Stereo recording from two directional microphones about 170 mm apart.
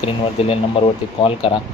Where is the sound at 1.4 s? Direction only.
30° left (ahead or behind).